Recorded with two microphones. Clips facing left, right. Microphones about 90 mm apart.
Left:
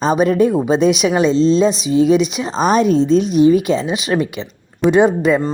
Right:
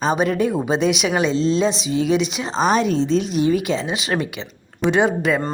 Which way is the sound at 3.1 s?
25° left (ahead or behind).